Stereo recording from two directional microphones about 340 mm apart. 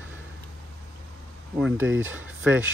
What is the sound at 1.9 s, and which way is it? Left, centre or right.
Speech, right.